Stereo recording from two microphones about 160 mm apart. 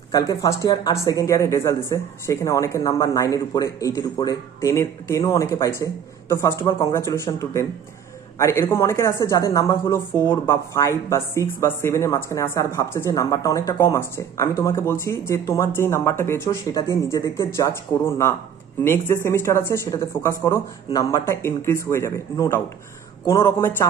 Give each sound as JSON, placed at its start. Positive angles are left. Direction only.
{"t": 0.1, "sound": "speech", "side_deg": 20}
{"t": 6.9, "sound": "speech", "side_deg": 15}